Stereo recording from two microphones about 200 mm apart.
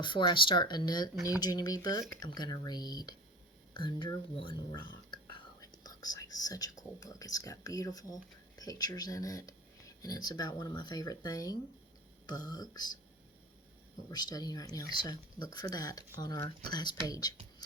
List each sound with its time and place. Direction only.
0.0 s speech: 25° left (ahead or behind)
14.1 s speech: 20° left (ahead or behind)